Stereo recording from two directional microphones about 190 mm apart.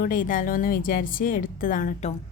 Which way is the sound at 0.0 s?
45° left (ahead or behind).